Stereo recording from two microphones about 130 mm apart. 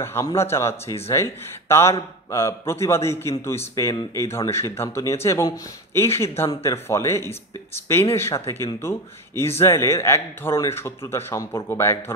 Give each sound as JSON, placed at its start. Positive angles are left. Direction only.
{"t": 0.0, "sound": "speech", "side_deg": 20}